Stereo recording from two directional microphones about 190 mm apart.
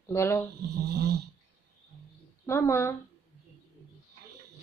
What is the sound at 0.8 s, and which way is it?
Snoring, 60° right (ahead or behind).